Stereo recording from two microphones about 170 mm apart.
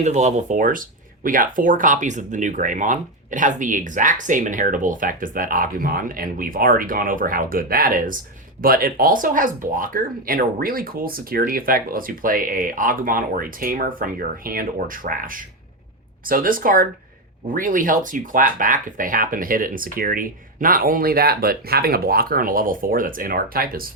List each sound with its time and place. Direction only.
0.0 s speech: 45° right (ahead or behind); by 23.9 s 60° right (ahead or behind)